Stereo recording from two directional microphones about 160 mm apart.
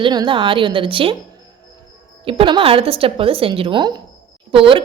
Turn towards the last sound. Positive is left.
turn(degrees=-35)  # may be behind; listen again after turning